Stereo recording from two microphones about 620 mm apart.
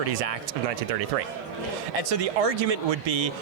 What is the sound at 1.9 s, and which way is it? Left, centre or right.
Speech, right.